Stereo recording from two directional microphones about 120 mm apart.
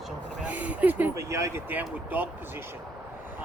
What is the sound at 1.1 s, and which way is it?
Speech, 25° right (ahead or behind).